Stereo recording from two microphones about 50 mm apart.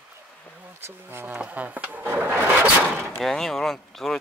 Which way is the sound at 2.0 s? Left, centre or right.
Right.